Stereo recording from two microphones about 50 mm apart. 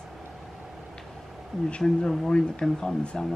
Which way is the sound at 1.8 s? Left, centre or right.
Centre.